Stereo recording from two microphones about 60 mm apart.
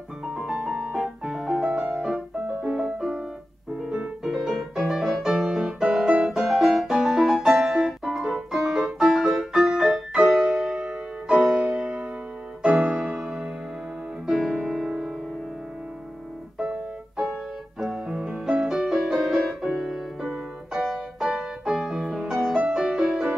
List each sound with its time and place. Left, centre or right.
0.3 s music: centre
3.7 s piano: centre
4.2 s music: centre
6.2 s piano: centre
6.9 s music: centre
13.1 s music: centre
16.7 s music: centre